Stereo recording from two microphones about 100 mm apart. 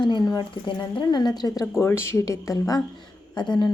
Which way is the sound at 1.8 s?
25° left (ahead or behind).